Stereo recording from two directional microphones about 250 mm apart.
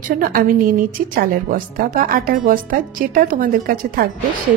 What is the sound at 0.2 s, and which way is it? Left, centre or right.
A woman's voice, right.